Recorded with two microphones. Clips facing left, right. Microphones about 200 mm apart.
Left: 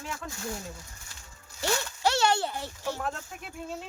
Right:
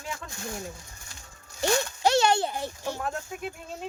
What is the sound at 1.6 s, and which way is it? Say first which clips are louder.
Speech: right 4 dB; 15° right (ahead or behind).